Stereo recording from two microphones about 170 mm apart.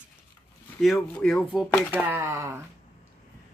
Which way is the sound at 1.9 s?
15° right (ahead or behind).